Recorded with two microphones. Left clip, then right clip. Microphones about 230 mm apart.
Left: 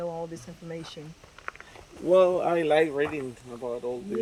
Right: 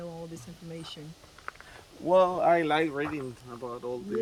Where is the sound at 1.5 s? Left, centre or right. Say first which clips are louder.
Left 3 dB; left.